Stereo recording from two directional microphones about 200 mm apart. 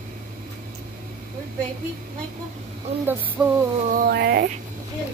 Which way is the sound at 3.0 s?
10° right (ahead or behind).